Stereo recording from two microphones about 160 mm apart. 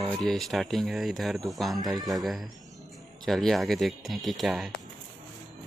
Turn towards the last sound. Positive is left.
turn(degrees=0)  # may be behind; listen again after turning